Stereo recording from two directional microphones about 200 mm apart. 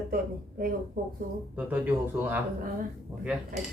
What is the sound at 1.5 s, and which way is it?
Speech, 10° right (ahead or behind).